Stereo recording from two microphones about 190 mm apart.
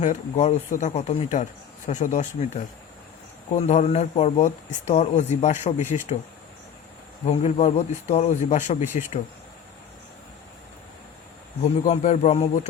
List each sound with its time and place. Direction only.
0.0 s speech: 35° left (ahead or behind)
3.5 s speech: 40° left (ahead or behind)
7.3 s speech: 35° left (ahead or behind)
11.6 s speech: 35° left (ahead or behind)